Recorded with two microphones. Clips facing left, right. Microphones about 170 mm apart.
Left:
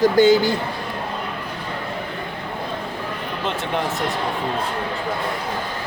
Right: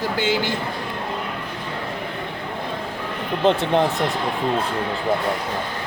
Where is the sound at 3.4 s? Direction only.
35° right (ahead or behind).